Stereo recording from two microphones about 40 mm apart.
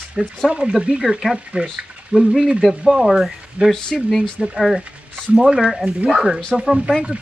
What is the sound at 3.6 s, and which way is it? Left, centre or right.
Speech, right.